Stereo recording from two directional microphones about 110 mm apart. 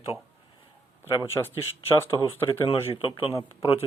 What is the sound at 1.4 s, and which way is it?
Speech, 25° left (ahead or behind).